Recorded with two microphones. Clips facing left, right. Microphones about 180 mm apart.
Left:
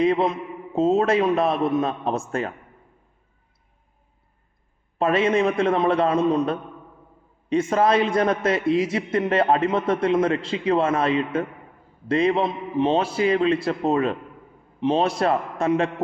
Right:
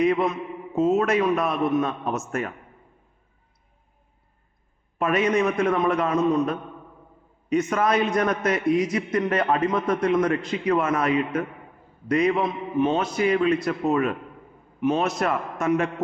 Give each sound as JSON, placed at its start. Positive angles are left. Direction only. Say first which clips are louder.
{"t": 0.0, "sound": "a man's voice", "louder": "left 1 dB", "side_deg": 30}
{"t": 4.9, "sound": "a man's voice", "louder": "left 2 dB", "side_deg": 30}